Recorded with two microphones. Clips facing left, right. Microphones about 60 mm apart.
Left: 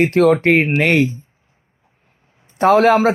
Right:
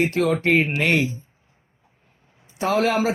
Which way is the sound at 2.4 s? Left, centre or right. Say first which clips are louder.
Left 9 dB; left.